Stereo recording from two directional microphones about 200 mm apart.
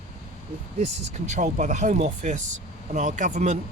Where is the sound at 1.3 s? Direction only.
35° right (ahead or behind).